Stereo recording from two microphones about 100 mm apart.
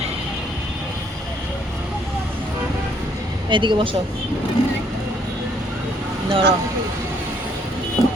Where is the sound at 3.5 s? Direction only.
55° right (ahead or behind).